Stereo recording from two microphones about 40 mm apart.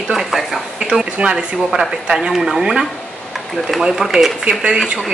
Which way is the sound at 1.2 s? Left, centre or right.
Right.